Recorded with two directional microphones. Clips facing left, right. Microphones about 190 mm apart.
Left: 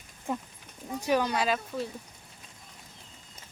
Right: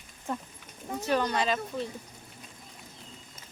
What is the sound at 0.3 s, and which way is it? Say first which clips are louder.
Speech: left 2 dB; 10° left (ahead or behind).